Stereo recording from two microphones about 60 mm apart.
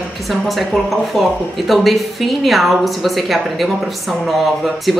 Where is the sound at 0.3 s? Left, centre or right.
Centre.